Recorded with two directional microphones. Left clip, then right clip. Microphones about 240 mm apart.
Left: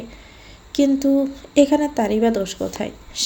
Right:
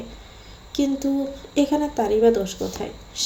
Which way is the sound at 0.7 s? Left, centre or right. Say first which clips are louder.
Left 6 dB; left.